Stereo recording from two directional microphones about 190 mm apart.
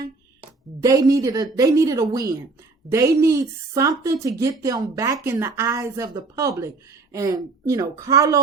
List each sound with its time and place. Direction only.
0.8 s a woman's voice: 20° right (ahead or behind)